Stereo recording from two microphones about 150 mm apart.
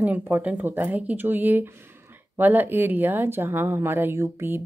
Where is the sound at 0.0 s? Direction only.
10° right (ahead or behind).